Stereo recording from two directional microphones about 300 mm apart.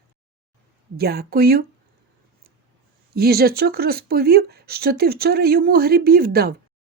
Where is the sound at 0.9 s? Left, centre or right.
Right.